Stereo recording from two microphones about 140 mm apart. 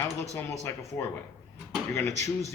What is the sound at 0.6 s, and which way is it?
Speech, 20° left (ahead or behind).